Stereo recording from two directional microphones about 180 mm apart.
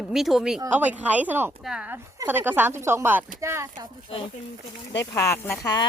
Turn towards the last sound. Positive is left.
turn(degrees=15)  # may be behind; listen again after turning